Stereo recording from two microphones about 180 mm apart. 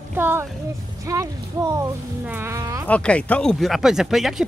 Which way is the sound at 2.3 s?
15° right (ahead or behind).